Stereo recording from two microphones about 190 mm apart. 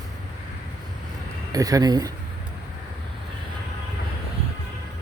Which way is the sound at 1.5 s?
20° right (ahead or behind).